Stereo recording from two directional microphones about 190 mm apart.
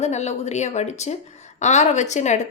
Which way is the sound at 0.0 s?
35° left (ahead or behind).